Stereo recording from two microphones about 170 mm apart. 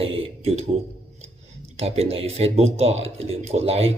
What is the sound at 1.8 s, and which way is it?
Speech, 35° right (ahead or behind).